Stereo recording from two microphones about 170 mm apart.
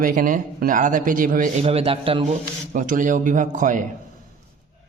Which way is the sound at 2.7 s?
50° right (ahead or behind).